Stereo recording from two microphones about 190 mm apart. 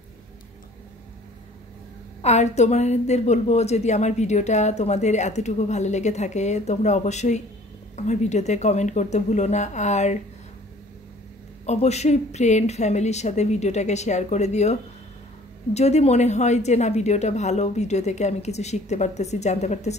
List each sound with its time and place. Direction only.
2.2 s a woman's voice: 35° left (ahead or behind)
11.6 s a woman's voice: 35° left (ahead or behind)